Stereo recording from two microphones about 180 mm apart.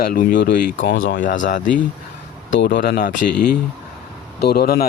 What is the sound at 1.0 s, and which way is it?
Speech, 50° left (ahead or behind).